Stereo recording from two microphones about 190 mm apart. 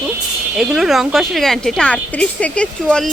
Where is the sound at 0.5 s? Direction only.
Centre (ahead or behind).